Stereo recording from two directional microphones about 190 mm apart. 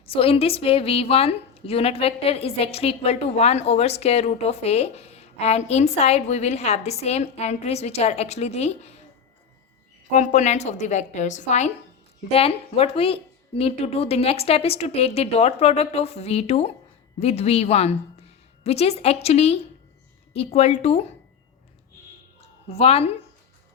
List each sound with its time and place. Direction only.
0.1 s a woman's voice: 30° left (ahead or behind)
10.1 s a woman's voice: 40° left (ahead or behind)
22.7 s a woman's voice: 30° left (ahead or behind)